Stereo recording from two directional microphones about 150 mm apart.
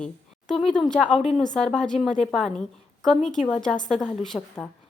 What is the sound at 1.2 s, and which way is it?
Speech, 50° left (ahead or behind).